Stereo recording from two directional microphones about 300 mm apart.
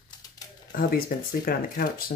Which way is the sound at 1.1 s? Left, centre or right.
Left.